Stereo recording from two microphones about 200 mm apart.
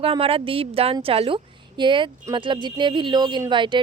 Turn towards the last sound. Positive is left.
turn(degrees=-25)  # may be behind; listen again after turning